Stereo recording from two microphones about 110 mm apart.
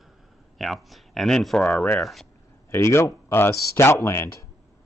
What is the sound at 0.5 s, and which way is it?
Speech, centre (ahead or behind).